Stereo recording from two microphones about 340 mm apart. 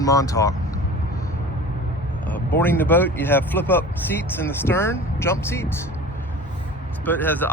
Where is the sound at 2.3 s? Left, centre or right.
Centre.